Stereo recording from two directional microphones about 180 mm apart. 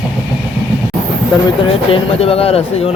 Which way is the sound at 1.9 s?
30° left (ahead or behind).